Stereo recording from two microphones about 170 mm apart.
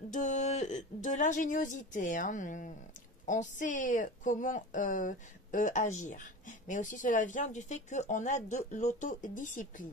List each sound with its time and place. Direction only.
0.1 s speech: 45° left (ahead or behind)